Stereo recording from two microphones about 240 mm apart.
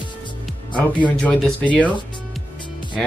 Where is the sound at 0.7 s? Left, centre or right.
Centre.